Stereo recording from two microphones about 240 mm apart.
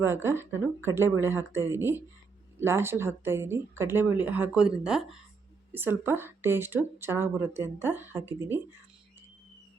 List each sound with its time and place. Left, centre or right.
0.0 s speech: centre